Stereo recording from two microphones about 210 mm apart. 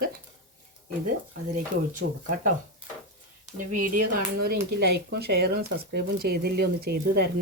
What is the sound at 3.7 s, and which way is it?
Speech, 40° right (ahead or behind).